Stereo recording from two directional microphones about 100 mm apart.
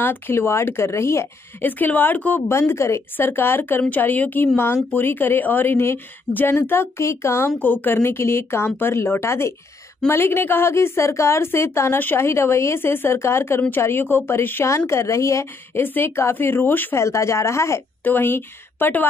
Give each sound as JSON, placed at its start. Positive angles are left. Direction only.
{"t": 0.0, "sound": "a woman's voice", "side_deg": 20}